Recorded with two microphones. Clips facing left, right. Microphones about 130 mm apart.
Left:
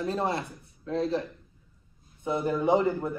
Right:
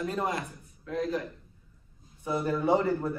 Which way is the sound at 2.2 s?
20° left (ahead or behind).